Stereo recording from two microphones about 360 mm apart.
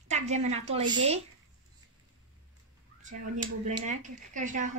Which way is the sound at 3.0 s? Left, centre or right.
Centre.